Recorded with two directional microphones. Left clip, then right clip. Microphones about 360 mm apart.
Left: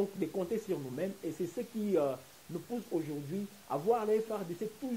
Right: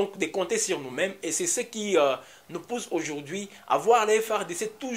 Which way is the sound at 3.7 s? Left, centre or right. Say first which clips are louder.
Right 10 dB; centre.